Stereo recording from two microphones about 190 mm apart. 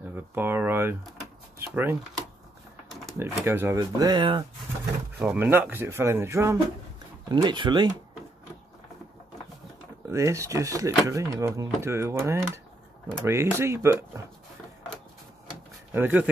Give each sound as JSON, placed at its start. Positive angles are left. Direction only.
{"t": 0.1, "sound": "a sound", "side_deg": -10}
{"t": 1.6, "sound": "speech", "side_deg": -10}
{"t": 3.2, "sound": "speech", "side_deg": -15}
{"t": 5.2, "sound": "speech", "side_deg": -10}
{"t": 10.0, "sound": "speech", "side_deg": -15}
{"t": 15.9, "sound": "speech", "side_deg": -10}